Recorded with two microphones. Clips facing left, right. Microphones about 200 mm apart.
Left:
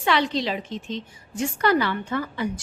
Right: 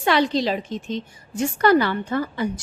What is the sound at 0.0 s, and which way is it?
A woman's voice, 40° right (ahead or behind).